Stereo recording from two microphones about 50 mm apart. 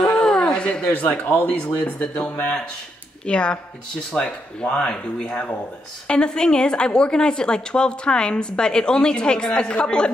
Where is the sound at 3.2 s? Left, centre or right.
Left.